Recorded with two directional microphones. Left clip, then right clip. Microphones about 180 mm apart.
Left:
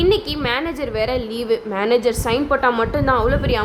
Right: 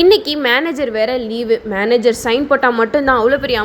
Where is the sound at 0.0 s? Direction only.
30° right (ahead or behind).